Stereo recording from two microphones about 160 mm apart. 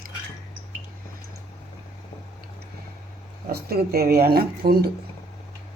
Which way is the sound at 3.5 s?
75° right (ahead or behind).